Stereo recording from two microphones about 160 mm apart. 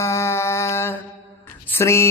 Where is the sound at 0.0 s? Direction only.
15° left (ahead or behind).